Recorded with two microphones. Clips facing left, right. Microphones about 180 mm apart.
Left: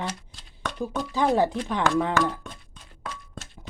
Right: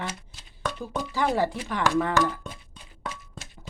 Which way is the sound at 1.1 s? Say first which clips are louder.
Left 3 dB; 20° left (ahead or behind).